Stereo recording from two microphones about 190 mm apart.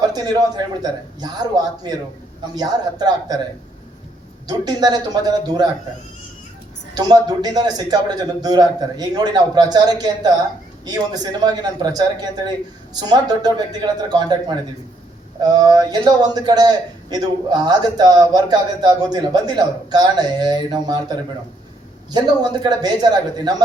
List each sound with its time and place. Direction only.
0.0 s a man's voice: 20° right (ahead or behind)
4.4 s a man's voice: 20° right (ahead or behind)
6.9 s a man's voice: 20° right (ahead or behind)